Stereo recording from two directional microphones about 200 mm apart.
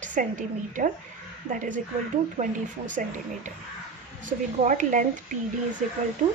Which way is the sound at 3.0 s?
40° right (ahead or behind).